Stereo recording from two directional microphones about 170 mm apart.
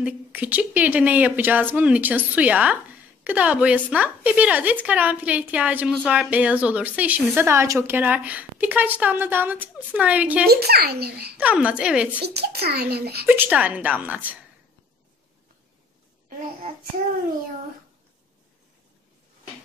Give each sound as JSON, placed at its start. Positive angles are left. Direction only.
{"t": 0.0, "sound": "a woman's voice", "side_deg": -10}
{"t": 10.5, "sound": "a child's voice", "side_deg": -70}
{"t": 11.3, "sound": "a woman's voice", "side_deg": -5}
{"t": 12.2, "sound": "a child's voice", "side_deg": -70}
{"t": 13.3, "sound": "a woman's voice", "side_deg": -10}